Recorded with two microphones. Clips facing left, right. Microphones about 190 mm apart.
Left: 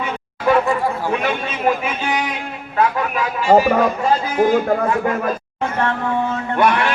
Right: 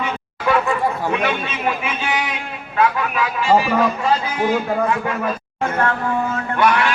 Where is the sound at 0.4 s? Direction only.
35° left (ahead or behind).